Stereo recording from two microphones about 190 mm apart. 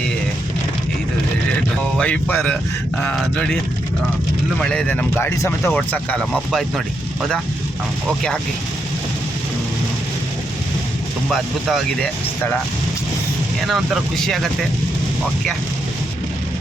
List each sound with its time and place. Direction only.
2.0 s speech: 5° left (ahead or behind)
4.6 s speech: 5° left (ahead or behind)
11.3 s speech: 5° left (ahead or behind)
13.7 s speech: centre (ahead or behind)